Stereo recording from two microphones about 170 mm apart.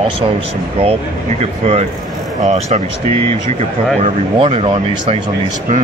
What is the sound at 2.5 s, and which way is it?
Speech, 40° right (ahead or behind).